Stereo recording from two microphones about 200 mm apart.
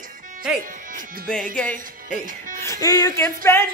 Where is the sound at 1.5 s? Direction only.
5° left (ahead or behind).